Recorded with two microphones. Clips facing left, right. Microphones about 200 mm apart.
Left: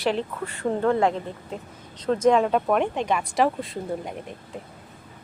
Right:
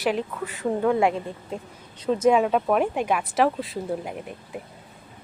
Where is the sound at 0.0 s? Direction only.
10° right (ahead or behind).